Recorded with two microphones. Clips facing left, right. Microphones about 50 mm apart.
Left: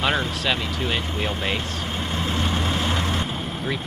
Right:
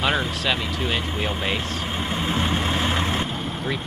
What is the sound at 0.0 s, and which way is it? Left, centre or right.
Speech, centre.